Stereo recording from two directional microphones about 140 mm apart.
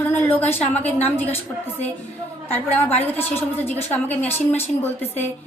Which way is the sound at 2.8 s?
15° left (ahead or behind).